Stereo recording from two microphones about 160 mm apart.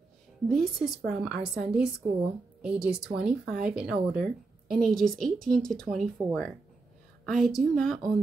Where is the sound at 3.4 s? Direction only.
65° right (ahead or behind).